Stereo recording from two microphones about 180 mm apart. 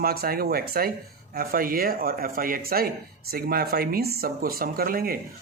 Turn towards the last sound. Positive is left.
turn(degrees=-55)  # may be behind; listen again after turning